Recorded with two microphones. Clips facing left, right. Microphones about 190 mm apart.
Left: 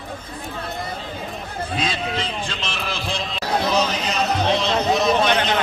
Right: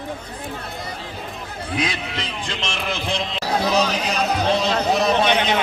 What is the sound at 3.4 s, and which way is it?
Chatter, 5° right (ahead or behind).